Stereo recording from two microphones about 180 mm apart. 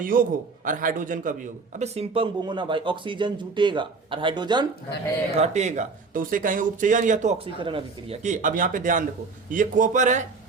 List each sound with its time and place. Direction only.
0.0 s a man's voice: 50° right (ahead or behind); by 4.6 s 25° right (ahead or behind)
5.4 s speech: 40° right (ahead or behind)
8.2 s speech: 45° right (ahead or behind)